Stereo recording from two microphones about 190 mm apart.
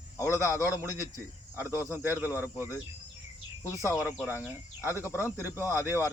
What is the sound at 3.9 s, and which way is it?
Speech, 10° right (ahead or behind).